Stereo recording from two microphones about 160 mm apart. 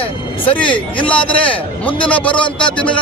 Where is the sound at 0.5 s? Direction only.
10° left (ahead or behind).